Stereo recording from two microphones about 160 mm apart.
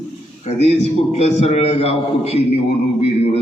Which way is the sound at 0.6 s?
40° left (ahead or behind).